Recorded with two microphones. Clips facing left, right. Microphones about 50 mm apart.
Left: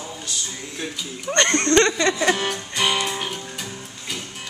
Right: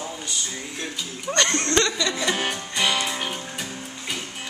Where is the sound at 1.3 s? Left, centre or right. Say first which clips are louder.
Left 4 dB; left.